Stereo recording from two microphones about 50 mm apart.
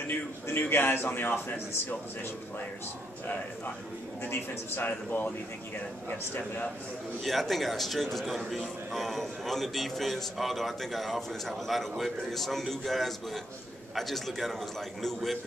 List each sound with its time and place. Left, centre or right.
0.0 s a man's voice: left
4.8 s speech: left
7.2 s a man's voice: centre